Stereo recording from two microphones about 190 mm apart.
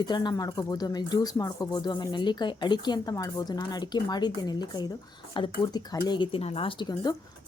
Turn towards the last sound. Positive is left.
turn(degrees=20)  # may be behind; listen again after turning